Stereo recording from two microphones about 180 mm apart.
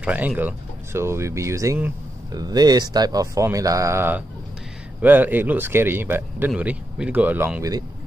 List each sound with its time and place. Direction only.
0.0 s speech: 5° right (ahead or behind)